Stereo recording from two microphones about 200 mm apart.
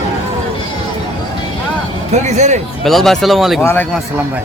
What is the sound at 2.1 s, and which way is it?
Speech, 35° right (ahead or behind).